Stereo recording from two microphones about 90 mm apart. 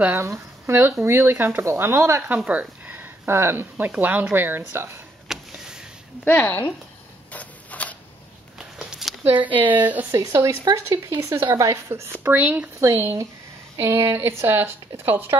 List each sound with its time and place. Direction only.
0.1 s speech: 30° right (ahead or behind)
2.2 s speech: 15° right (ahead or behind)
5.3 s a sound: 5° right (ahead or behind)
6.2 s speech: 20° left (ahead or behind)
7.3 s a sound: 15° left (ahead or behind)
8.5 s a sound: 5° right (ahead or behind)
9.2 s speech: 20° right (ahead or behind)
10.1 s speech: 35° right (ahead or behind)
11.1 s speech: 30° right (ahead or behind)
12.4 s speech: 15° right (ahead or behind)